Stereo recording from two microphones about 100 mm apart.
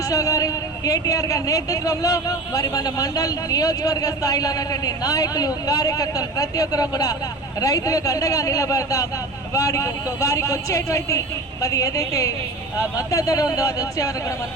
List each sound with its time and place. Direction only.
0.1 s speech: 35° left (ahead or behind)